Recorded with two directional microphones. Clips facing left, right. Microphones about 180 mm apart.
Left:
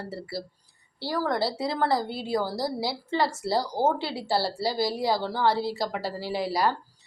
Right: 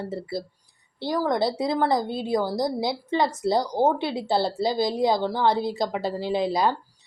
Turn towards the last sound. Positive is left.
turn(degrees=-20)  # may be behind; listen again after turning